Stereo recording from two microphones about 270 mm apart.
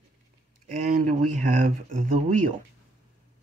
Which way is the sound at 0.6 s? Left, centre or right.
Right.